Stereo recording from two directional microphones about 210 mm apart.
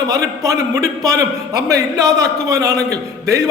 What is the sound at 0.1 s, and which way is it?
A man's voice, 15° right (ahead or behind).